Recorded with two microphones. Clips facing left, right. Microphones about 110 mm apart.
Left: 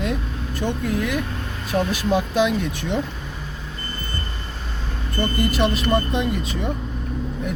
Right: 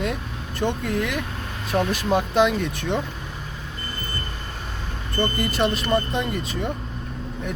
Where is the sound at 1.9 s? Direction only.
50° right (ahead or behind).